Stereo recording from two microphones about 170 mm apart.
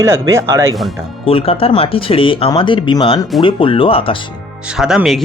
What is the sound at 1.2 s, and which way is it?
Speech, 35° left (ahead or behind).